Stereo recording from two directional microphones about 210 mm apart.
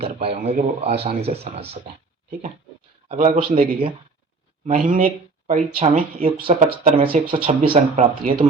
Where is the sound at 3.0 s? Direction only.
35° right (ahead or behind).